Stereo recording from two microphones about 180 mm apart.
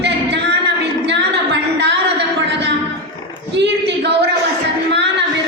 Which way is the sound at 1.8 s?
70° right (ahead or behind).